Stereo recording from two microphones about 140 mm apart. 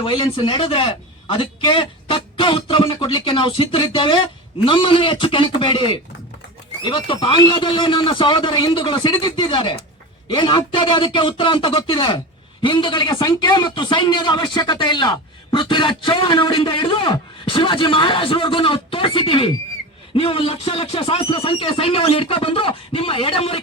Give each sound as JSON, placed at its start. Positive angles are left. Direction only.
{"t": 0.0, "sound": "a man's voice", "side_deg": 35}